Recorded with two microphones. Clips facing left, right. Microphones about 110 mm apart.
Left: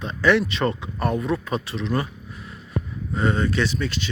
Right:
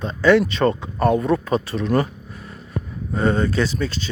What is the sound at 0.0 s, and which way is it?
Speech, 35° right (ahead or behind).